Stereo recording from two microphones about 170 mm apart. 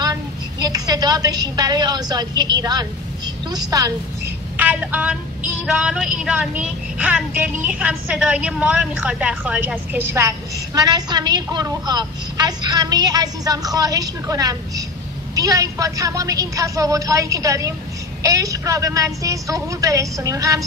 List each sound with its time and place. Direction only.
0.0 s a woman's voice: 20° right (ahead or behind)
4.6 s a woman's voice: 10° right (ahead or behind)